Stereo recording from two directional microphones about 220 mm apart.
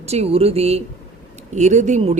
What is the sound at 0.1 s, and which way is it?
A man's voice, 25° right (ahead or behind).